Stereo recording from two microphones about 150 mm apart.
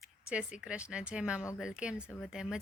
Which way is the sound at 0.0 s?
5° right (ahead or behind).